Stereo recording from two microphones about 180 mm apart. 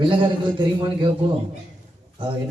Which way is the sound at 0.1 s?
25° right (ahead or behind).